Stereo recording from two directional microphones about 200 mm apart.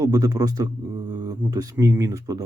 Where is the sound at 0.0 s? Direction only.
20° right (ahead or behind).